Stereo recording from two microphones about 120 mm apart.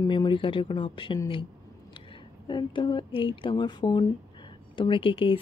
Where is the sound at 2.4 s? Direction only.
40° left (ahead or behind).